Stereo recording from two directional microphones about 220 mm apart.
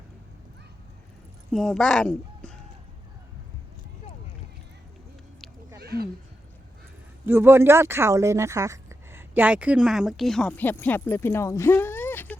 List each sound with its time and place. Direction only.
1.5 s speech: centre (ahead or behind)
5.8 s a sound: 45° right (ahead or behind)
7.3 s speech: 10° right (ahead or behind); by 12.4 s 10° left (ahead or behind)